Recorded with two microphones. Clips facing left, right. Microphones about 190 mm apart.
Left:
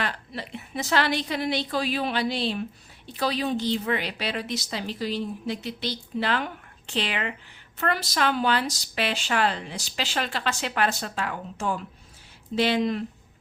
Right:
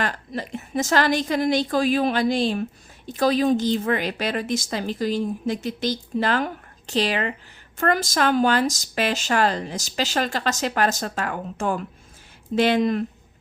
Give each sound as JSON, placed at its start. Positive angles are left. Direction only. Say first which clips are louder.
{"t": 0.0, "sound": "a woman's voice", "louder": "right 4 dB", "side_deg": -45}